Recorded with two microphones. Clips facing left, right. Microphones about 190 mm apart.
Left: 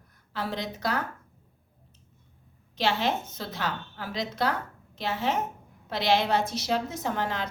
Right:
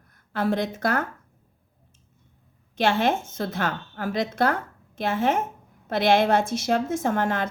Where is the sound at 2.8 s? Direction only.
50° right (ahead or behind).